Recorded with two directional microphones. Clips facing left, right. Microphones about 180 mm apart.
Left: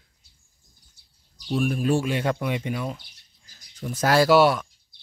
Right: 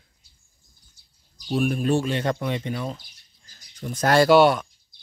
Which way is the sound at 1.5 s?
Centre (ahead or behind).